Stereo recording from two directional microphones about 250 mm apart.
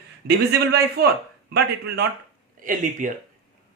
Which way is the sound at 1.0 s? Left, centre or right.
Right.